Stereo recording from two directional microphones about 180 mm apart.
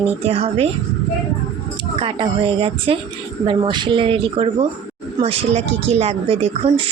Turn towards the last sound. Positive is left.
turn(degrees=-35)  # may be behind; listen again after turning